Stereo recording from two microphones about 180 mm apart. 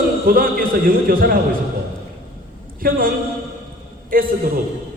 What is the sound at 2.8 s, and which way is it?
Speech, 55° right (ahead or behind).